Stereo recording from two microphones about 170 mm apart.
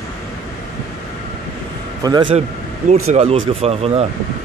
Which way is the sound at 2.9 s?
40° right (ahead or behind).